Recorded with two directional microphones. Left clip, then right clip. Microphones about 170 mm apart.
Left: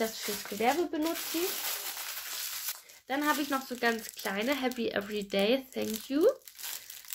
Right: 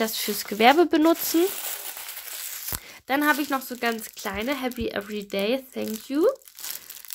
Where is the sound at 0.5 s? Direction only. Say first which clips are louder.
Right 12 dB; 75° right (ahead or behind).